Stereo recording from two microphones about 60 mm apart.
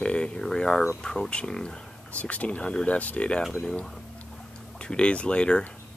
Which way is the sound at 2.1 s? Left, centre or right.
Left.